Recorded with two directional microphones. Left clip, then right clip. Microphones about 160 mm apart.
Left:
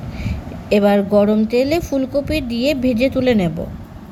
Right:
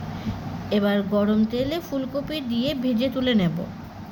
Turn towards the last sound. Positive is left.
turn(degrees=40)  # may be behind; listen again after turning